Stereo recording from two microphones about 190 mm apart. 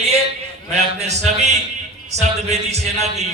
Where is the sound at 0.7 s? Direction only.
35° right (ahead or behind).